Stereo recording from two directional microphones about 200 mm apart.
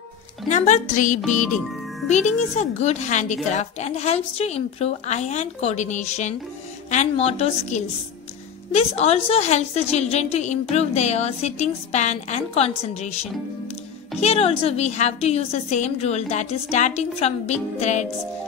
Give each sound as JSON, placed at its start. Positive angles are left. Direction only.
{"t": 0.5, "sound": "a woman's voice", "side_deg": 40}